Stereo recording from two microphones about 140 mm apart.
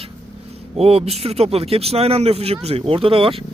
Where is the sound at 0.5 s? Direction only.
45° right (ahead or behind).